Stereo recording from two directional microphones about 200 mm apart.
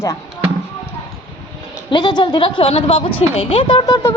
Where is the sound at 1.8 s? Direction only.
20° left (ahead or behind).